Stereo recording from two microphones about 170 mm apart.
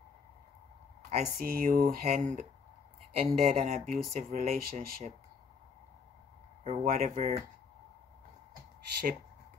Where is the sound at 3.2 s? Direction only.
40° right (ahead or behind).